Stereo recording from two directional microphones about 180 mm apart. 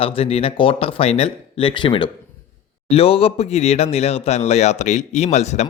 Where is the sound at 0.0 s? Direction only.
30° left (ahead or behind).